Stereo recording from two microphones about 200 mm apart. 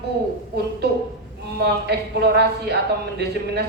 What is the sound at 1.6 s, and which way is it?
A man's voice, 55° right (ahead or behind).